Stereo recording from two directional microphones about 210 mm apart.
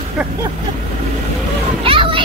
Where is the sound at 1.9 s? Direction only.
25° right (ahead or behind).